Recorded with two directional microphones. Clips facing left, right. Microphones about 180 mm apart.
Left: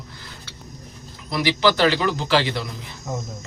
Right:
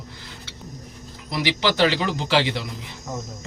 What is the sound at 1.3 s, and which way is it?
Speech, 20° right (ahead or behind).